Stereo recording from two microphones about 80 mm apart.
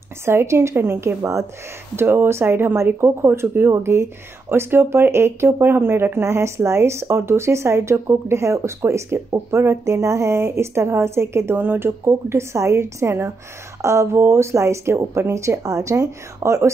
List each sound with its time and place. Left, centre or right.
0.2 s speech: right